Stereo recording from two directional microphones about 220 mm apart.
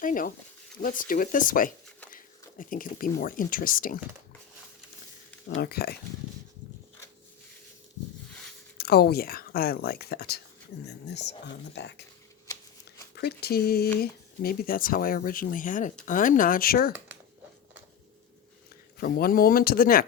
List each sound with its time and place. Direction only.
0.0 s speech: 40° left (ahead or behind)
5.5 s speech: 45° left (ahead or behind)
8.8 s speech: 45° left (ahead or behind)
13.1 s speech: 45° left (ahead or behind)
18.9 s speech: 45° left (ahead or behind)